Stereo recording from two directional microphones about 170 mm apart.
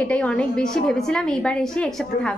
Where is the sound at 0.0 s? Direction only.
5° left (ahead or behind).